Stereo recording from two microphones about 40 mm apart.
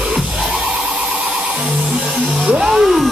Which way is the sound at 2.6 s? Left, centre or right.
Centre.